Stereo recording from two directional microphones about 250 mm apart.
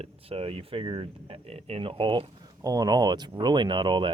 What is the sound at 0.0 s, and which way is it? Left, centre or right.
Speech, right.